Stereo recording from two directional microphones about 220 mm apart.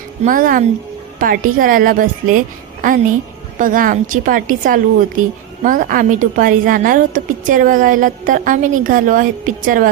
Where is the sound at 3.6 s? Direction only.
40° right (ahead or behind).